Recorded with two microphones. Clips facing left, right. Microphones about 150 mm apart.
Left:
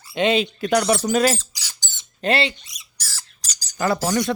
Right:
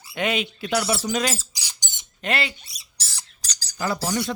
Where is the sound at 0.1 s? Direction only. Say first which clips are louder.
Left 6 dB; 25° left (ahead or behind).